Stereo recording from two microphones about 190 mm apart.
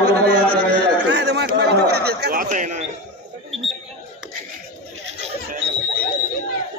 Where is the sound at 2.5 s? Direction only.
40° right (ahead or behind).